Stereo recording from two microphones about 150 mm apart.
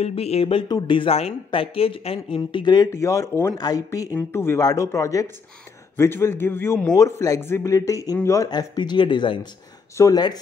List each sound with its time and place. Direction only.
0.0 s speech: 45° left (ahead or behind); by 2.9 s 30° left (ahead or behind)
2.9 s a man's voice: 20° left (ahead or behind)